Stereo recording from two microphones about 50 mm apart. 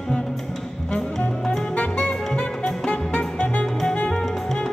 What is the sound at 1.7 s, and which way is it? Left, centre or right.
Music, left.